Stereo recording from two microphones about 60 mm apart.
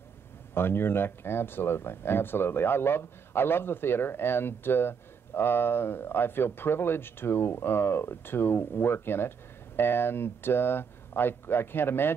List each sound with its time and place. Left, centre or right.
0.6 s speech: left